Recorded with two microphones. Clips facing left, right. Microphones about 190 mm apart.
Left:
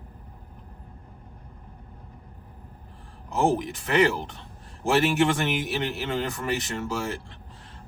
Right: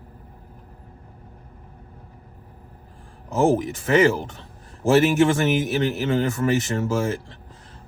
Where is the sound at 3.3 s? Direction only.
45° right (ahead or behind).